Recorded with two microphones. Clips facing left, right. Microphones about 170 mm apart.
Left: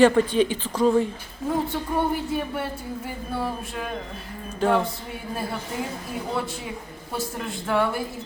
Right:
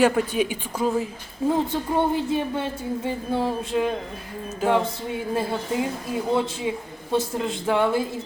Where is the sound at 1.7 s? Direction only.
20° right (ahead or behind).